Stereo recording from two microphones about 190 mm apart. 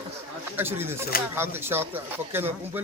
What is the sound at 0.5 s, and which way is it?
Speech, 10° right (ahead or behind).